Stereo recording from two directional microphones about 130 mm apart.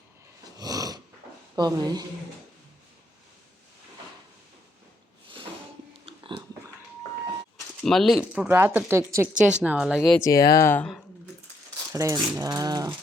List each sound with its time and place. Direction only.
0.6 s dog: 30° right (ahead or behind)
1.5 s speech: 30° right (ahead or behind)
6.1 s pig: 45° right (ahead or behind)
7.9 s speech: centre (ahead or behind)
8.3 s speech: 10° right (ahead or behind)
9.6 s speech: 5° right (ahead or behind)
10.2 s speech: 25° left (ahead or behind)
11.9 s speech: 25° right (ahead or behind)